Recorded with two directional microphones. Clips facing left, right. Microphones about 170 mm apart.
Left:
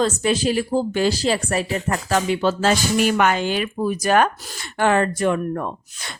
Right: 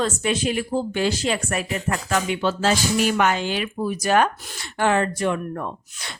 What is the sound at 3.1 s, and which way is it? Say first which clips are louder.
Speech: left 2 dB; 55° left (ahead or behind).